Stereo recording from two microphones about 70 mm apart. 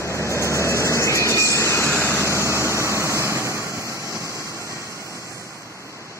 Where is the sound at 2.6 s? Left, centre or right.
Right.